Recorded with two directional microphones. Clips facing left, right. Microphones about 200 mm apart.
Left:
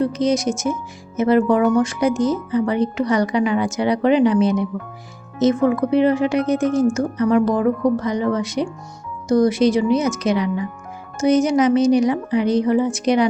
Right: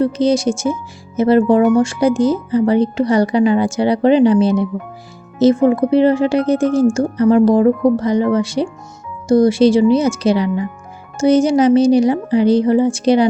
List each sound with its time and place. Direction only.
0.0 s a woman's voice: 30° right (ahead or behind)